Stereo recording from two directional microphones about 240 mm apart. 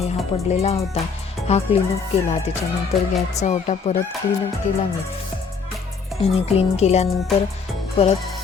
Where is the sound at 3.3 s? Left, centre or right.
Left.